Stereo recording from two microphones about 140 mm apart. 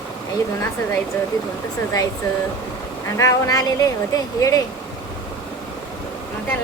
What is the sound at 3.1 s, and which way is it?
Speech, 25° left (ahead or behind).